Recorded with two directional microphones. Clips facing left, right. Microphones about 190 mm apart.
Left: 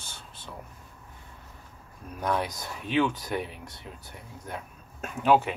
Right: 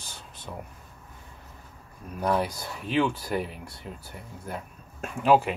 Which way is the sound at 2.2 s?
5° right (ahead or behind).